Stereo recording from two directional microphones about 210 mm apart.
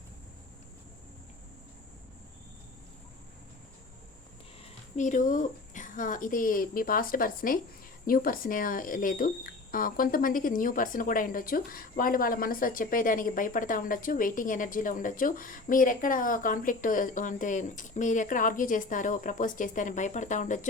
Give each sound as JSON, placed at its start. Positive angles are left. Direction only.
{"t": 4.9, "sound": "speech", "side_deg": 35}